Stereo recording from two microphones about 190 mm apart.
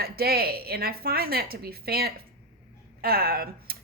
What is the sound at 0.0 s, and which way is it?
A woman's voice, 55° right (ahead or behind).